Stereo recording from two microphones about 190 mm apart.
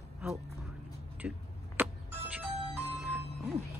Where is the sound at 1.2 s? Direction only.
5° right (ahead or behind).